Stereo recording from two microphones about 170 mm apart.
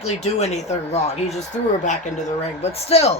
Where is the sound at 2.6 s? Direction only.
35° left (ahead or behind).